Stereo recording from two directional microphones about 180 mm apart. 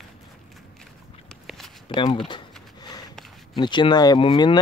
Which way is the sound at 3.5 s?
25° left (ahead or behind).